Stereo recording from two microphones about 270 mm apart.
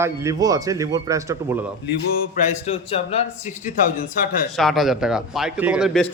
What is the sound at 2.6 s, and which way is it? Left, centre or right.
Speech, left.